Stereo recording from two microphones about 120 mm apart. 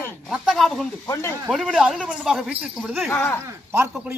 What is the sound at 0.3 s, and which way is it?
Speech, centre (ahead or behind).